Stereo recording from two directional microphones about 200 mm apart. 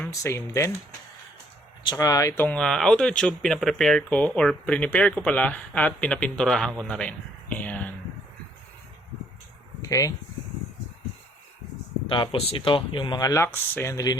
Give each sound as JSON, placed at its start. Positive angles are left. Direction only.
{"t": 0.1, "sound": "speech", "side_deg": 15}
{"t": 1.8, "sound": "speech", "side_deg": 20}
{"t": 7.6, "sound": "a sound", "side_deg": 5}
{"t": 9.8, "sound": "speech", "side_deg": 15}
{"t": 12.0, "sound": "speech", "side_deg": 25}